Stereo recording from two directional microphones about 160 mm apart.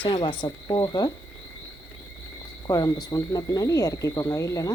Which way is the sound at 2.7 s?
20° left (ahead or behind).